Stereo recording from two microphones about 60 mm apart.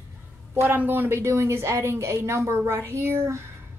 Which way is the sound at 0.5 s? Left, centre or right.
Right.